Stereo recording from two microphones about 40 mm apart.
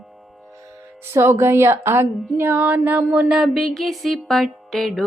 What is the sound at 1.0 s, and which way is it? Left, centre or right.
Music, right.